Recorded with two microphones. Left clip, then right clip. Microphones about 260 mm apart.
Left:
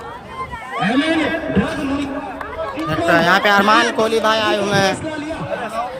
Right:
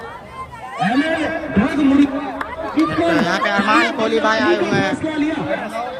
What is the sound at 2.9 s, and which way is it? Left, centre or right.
Speech, centre.